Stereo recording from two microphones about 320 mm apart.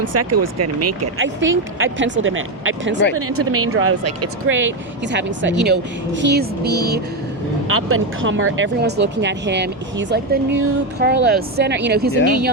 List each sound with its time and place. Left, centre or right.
0.0 s speech: right
1.2 s speech: right
7.7 s speech: right